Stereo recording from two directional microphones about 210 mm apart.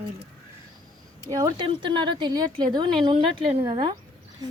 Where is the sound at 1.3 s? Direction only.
20° right (ahead or behind).